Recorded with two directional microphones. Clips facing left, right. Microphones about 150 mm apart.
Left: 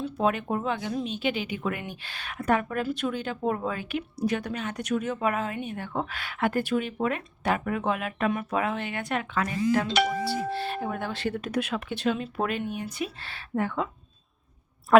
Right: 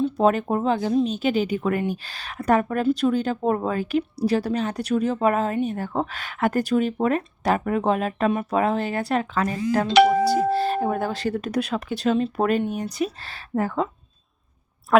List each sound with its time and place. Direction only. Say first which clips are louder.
0.2 s speech: right 4 dB; 40° right (ahead or behind)
9.9 s a sound: right 10 dB; 80° right
10.2 s speech: right 9 dB; 40° right (ahead or behind)
14.9 s a woman's voice: even; centre (ahead or behind)